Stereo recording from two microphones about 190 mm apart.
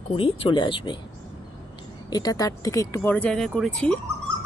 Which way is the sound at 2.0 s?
20° left (ahead or behind).